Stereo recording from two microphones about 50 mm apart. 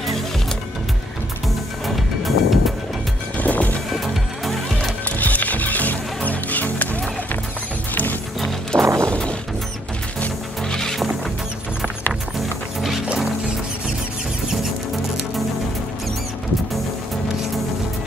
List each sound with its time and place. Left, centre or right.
2.0 s music: centre
3.3 s music: left
3.9 s music: centre
5.0 s music: left
7.9 s music: left
8.7 s music: right
10.7 s music: centre